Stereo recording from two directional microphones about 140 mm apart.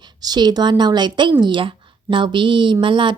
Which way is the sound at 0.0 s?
30° right (ahead or behind).